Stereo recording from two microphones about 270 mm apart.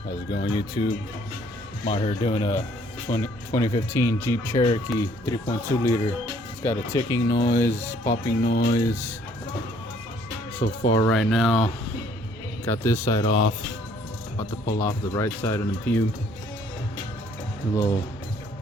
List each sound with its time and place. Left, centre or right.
0.4 s speech: centre
4.5 s speech: left
4.9 s speech: centre
8.4 s speech: left
8.7 s speech: centre
10.6 s speech: left
11.0 s speech: centre
12.6 s speech: centre